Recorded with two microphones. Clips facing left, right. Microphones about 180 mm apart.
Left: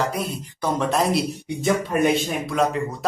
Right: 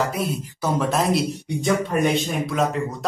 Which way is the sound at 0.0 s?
Centre (ahead or behind).